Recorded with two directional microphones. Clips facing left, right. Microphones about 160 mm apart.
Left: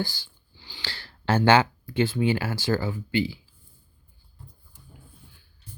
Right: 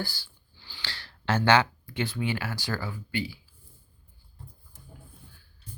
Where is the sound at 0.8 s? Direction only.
30° left (ahead or behind).